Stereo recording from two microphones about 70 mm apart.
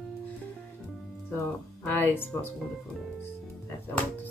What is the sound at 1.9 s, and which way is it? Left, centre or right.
Speech, left.